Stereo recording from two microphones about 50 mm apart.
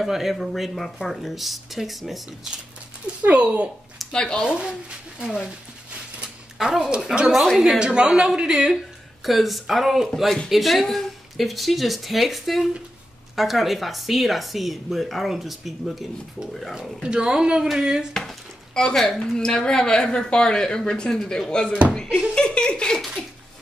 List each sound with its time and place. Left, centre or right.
0.0 s speech: centre
3.3 s speech: right
4.1 s a woman's voice: centre
4.5 s speech: centre
6.6 s speech: centre
7.8 s speech: centre
9.2 s speech: centre
17.0 s speech: centre
18.8 s a woman's voice: centre